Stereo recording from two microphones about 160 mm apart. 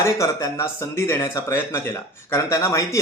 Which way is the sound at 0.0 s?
20° left (ahead or behind).